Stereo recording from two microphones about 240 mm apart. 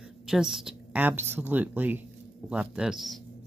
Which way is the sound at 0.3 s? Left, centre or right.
Centre.